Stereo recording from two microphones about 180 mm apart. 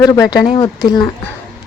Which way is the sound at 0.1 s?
20° left (ahead or behind).